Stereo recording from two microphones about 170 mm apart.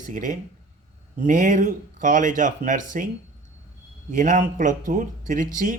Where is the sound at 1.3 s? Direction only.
50° right (ahead or behind).